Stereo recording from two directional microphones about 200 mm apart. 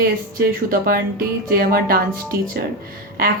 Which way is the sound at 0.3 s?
45° right (ahead or behind).